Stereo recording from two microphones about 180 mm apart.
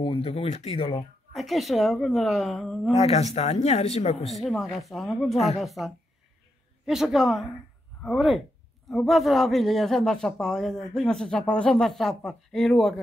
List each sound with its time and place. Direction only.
0.0 s speech: 30° left (ahead or behind)
1.3 s a man's voice: centre (ahead or behind)
2.9 s speech: 35° left (ahead or behind)
4.3 s a man's voice: centre (ahead or behind)